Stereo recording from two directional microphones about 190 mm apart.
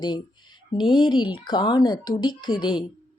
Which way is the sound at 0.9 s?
25° left (ahead or behind).